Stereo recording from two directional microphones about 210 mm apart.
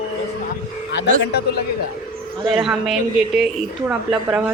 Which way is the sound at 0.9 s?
55° left (ahead or behind).